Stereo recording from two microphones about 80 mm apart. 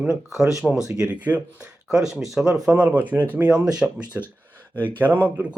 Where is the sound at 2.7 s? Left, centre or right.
Centre.